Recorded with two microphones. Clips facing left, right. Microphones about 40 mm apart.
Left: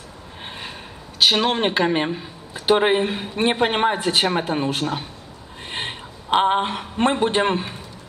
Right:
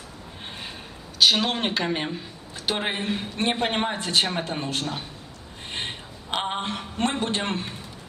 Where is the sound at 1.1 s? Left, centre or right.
Centre.